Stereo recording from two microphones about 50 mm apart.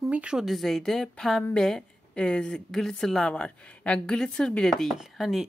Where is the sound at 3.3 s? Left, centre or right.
Left.